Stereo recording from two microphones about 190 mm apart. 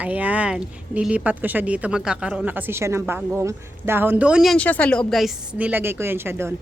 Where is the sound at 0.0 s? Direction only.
10° right (ahead or behind).